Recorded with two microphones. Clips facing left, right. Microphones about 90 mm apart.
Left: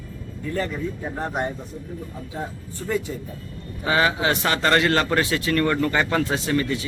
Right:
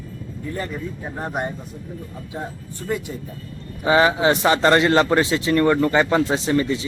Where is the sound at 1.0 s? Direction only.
10° right (ahead or behind).